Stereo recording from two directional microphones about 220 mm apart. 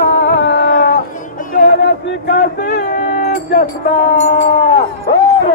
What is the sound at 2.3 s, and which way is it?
Music, 40° left (ahead or behind).